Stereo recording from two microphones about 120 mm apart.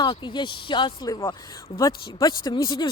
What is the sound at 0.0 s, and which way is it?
Speech, 40° left (ahead or behind).